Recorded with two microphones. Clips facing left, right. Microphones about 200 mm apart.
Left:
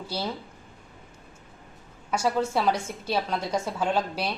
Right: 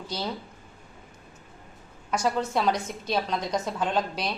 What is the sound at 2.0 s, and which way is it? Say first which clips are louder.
A woman's voice: left 1 dB; 5° left (ahead or behind).